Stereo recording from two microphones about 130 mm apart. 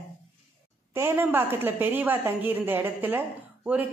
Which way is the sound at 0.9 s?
20° right (ahead or behind).